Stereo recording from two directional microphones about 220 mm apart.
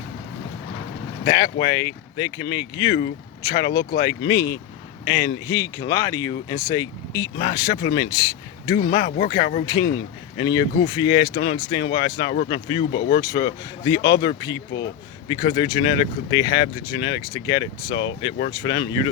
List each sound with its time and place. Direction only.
1.2 s speech: 20° left (ahead or behind)
9.0 s speech: 40° left (ahead or behind)
9.6 s speech: 15° left (ahead or behind)
12.9 s speech: 45° left (ahead or behind)
13.1 s speech: 15° left (ahead or behind)